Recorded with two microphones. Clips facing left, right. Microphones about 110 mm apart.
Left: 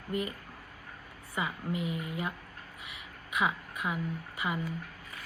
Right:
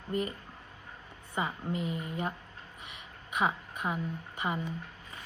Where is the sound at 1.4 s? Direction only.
35° right (ahead or behind).